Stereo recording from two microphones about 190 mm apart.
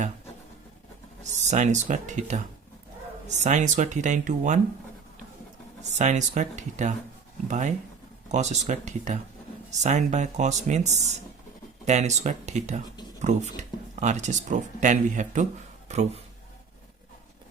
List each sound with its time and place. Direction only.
1.2 s speech: 40° right (ahead or behind)
5.9 s speech: 40° right (ahead or behind)